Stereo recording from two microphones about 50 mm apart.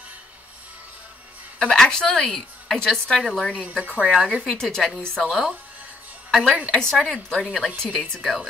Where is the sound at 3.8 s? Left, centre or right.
Right.